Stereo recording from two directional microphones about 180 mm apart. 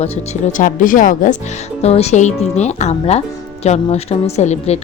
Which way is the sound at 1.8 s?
35° left (ahead or behind).